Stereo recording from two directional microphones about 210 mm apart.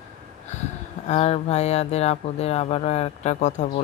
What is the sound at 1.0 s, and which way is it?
Speech, 30° left (ahead or behind).